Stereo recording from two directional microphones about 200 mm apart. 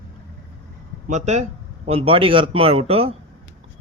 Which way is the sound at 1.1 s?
35° right (ahead or behind).